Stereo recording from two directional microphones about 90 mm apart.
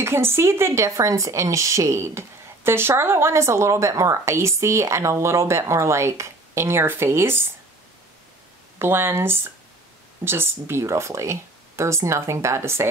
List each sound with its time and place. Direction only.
0.0 s speech: 25° right (ahead or behind)
8.7 s speech: 25° right (ahead or behind)